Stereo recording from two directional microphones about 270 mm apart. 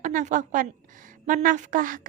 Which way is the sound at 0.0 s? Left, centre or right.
Right.